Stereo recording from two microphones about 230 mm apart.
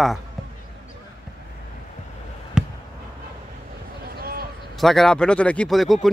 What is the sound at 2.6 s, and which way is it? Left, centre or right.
Fireworks, centre.